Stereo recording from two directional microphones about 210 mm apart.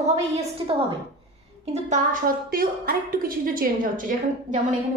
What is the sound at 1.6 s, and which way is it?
A woman's voice, 35° right (ahead or behind).